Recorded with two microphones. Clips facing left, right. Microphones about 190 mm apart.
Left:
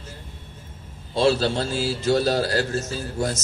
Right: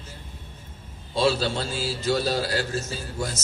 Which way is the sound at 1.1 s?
40° left (ahead or behind).